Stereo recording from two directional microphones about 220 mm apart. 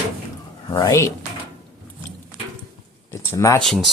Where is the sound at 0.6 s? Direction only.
15° left (ahead or behind).